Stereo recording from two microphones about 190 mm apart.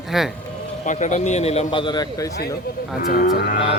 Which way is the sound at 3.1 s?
45° left (ahead or behind).